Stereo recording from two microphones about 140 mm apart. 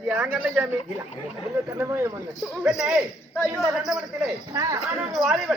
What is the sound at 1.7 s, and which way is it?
Speech, 20° right (ahead or behind).